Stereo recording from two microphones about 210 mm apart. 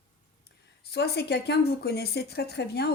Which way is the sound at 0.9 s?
50° left (ahead or behind).